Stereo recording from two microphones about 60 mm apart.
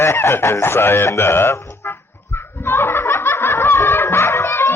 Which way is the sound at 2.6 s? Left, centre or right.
Left.